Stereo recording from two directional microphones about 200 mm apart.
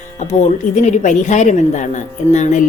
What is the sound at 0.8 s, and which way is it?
A woman's voice, 35° left (ahead or behind).